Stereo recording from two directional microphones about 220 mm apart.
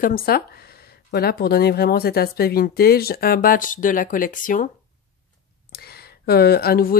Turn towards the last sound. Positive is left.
turn(degrees=45)  # may be behind; listen again after turning